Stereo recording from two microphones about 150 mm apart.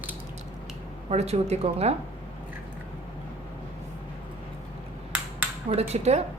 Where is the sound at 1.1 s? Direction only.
45° right (ahead or behind).